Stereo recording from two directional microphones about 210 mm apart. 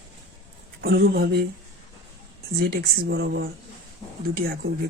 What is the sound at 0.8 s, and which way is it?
Speech, 50° right (ahead or behind).